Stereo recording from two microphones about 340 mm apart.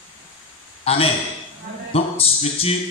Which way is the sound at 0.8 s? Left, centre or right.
Centre.